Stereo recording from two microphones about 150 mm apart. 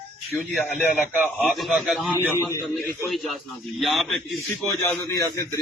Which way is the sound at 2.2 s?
20° left (ahead or behind).